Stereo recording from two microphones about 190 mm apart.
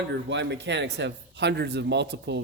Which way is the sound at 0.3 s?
70° right (ahead or behind).